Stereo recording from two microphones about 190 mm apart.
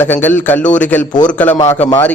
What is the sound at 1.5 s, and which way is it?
Speech, 25° left (ahead or behind).